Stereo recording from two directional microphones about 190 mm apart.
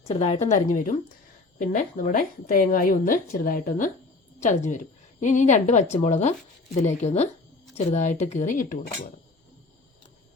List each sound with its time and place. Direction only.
0.1 s a woman's voice: 35° left (ahead or behind)